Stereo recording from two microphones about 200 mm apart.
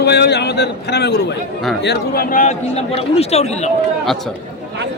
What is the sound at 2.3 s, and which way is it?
A man's voice, 35° left (ahead or behind).